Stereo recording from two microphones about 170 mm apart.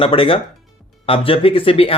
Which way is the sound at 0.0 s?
30° left (ahead or behind).